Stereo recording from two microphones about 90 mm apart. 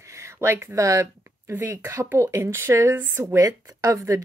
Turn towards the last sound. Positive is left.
turn(degrees=-35)  # may be behind; listen again after turning